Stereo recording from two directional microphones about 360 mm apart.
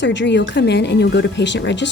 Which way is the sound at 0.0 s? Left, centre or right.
Left.